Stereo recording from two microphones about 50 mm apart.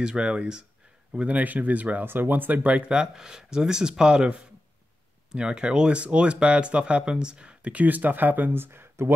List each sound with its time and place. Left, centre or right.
0.0 s speech: centre
1.2 s speech: right
2.6 s speech: right